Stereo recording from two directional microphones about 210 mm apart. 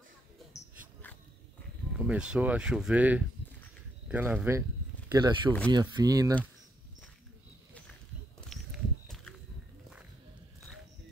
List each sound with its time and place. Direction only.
2.0 s speech: 5° right (ahead or behind)
5.1 s speech: 20° right (ahead or behind)
8.5 s walk: centre (ahead or behind)